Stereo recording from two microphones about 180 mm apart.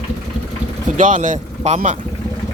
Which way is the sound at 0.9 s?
45° right (ahead or behind).